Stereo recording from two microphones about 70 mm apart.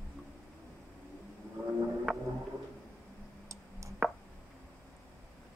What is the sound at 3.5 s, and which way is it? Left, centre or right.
Clicking, right.